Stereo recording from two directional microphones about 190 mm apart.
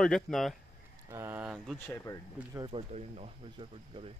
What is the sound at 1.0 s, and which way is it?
Speech, 10° right (ahead or behind).